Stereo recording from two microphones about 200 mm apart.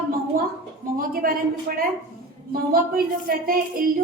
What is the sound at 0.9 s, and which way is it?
Speech, 45° right (ahead or behind).